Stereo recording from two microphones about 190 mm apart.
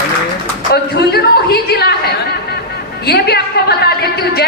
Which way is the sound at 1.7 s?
55° left (ahead or behind).